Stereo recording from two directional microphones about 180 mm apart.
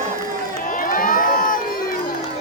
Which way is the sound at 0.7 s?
50° left (ahead or behind).